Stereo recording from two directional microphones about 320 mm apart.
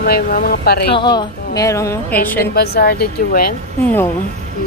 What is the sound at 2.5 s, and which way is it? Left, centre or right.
A woman's voice, left.